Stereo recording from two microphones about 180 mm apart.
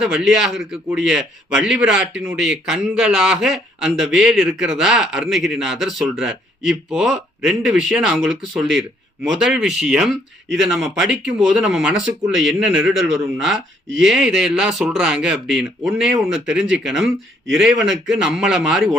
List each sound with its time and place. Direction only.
0.0 s speech: 5° right (ahead or behind)
17.7 s a man's voice: 90° right
18.2 s speech: 5° right (ahead or behind)